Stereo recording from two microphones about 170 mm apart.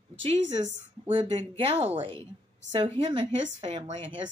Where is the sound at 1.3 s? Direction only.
35° right (ahead or behind).